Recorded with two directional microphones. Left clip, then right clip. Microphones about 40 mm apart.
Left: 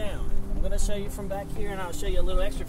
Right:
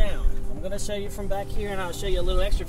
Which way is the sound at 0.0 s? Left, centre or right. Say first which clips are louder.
Right 3 dB; left.